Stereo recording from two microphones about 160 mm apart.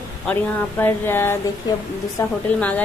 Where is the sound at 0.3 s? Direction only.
10° left (ahead or behind).